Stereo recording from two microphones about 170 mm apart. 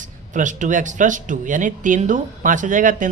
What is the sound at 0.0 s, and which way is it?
A man's voice, 50° right (ahead or behind).